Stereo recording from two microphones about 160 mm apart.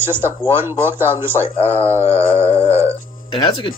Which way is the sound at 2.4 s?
40° left (ahead or behind).